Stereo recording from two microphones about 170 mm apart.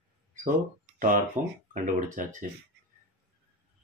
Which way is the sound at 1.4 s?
45° right (ahead or behind).